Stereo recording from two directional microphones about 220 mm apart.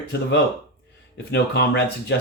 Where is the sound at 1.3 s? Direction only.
50° left (ahead or behind).